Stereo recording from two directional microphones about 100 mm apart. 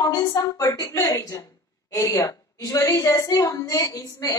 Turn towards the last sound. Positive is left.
turn(degrees=35)  # may be behind; listen again after turning